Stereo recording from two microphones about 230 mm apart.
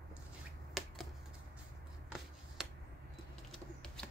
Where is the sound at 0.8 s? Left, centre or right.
Centre.